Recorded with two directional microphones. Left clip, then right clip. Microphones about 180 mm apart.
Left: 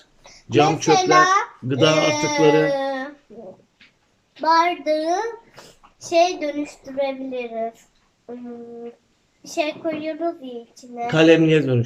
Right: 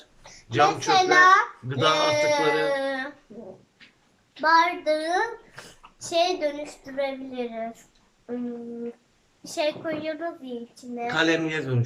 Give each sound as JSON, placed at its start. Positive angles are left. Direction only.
{"t": 0.5, "sound": "a man's voice", "side_deg": 35}
{"t": 0.9, "sound": "a woman's voice", "side_deg": 10}
{"t": 1.6, "sound": "a man's voice", "side_deg": 35}
{"t": 2.7, "sound": "humming", "side_deg": 10}
{"t": 4.4, "sound": "a woman's voice", "side_deg": 10}
{"t": 9.6, "sound": "a woman's voice", "side_deg": 10}
{"t": 11.0, "sound": "a man's voice", "side_deg": 40}